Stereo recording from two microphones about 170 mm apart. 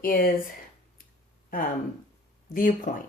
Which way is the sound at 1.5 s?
55° left (ahead or behind).